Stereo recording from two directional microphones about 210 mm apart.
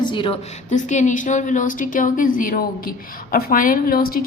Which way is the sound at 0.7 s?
35° left (ahead or behind).